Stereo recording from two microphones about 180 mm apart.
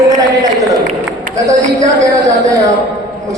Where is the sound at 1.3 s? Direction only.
20° right (ahead or behind).